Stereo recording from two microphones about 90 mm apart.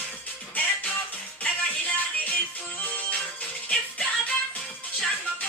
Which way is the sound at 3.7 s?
15° left (ahead or behind).